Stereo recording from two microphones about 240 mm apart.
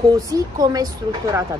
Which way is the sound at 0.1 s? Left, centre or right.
Centre.